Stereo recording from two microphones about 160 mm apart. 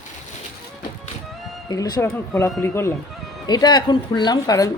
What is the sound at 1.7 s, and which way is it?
Speech, 25° left (ahead or behind).